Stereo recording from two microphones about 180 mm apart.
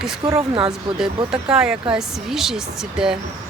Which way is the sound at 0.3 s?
15° right (ahead or behind).